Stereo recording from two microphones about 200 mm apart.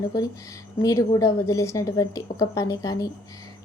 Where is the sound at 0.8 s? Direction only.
15° left (ahead or behind).